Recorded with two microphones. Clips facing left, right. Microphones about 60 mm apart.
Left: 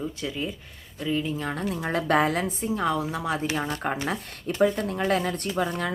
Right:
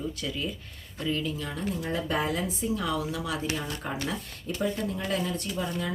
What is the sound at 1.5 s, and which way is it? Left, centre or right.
A woman's voice, left.